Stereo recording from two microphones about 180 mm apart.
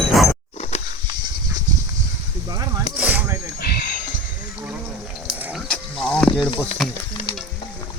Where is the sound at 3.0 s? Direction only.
10° right (ahead or behind).